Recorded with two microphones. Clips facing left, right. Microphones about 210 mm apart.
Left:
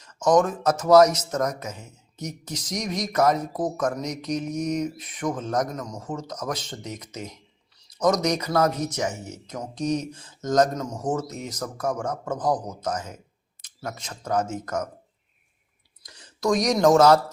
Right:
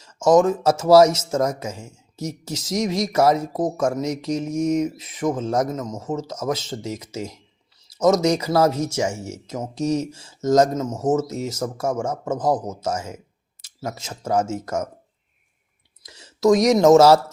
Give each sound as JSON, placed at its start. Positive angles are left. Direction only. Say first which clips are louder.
{"t": 0.0, "sound": "speech", "louder": "right 4 dB", "side_deg": -25}
{"t": 16.0, "sound": "speech", "louder": "right 7 dB", "side_deg": -25}